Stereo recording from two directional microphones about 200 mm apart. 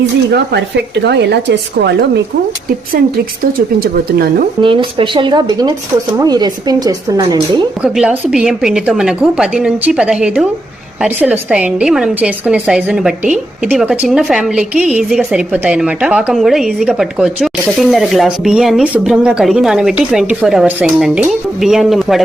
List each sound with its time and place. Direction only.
0.3 s a woman's voice: 55° right (ahead or behind)
3.8 s speech: 50° right (ahead or behind)
4.6 s speech: 25° right (ahead or behind)
7.8 s a woman's voice: 5° right (ahead or behind)